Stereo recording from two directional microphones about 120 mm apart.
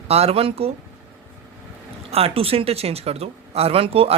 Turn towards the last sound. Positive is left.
turn(degrees=-55)  # may be behind; listen again after turning